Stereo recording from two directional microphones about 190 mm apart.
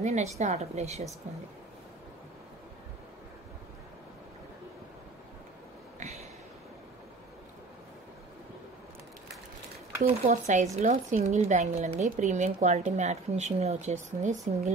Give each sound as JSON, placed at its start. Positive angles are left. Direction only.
{"t": 0.0, "sound": "a woman's voice", "side_deg": -35}
{"t": 10.3, "sound": "a woman's voice", "side_deg": -40}